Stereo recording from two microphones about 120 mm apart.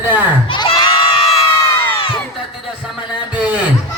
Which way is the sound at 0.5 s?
40° left (ahead or behind).